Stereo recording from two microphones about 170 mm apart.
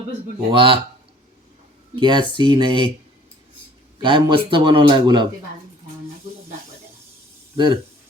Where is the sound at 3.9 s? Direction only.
30° right (ahead or behind).